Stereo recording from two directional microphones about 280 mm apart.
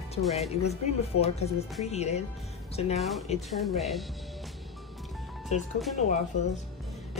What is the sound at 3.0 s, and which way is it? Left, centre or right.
Speech, centre.